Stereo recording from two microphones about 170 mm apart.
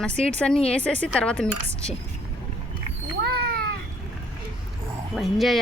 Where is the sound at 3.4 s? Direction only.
65° right (ahead or behind).